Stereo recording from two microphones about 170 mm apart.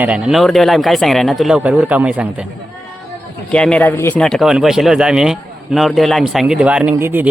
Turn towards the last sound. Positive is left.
turn(degrees=-15)  # may be behind; listen again after turning